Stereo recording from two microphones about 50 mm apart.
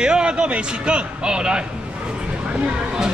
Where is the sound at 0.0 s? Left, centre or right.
Centre.